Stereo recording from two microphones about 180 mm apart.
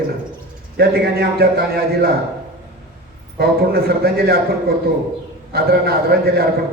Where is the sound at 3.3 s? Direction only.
60° right (ahead or behind).